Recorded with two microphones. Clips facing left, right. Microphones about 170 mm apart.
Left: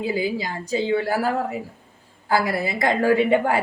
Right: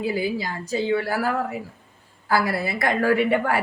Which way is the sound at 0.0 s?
20° left (ahead or behind).